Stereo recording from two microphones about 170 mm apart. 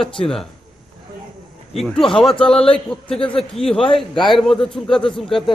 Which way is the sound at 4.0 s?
Centre (ahead or behind).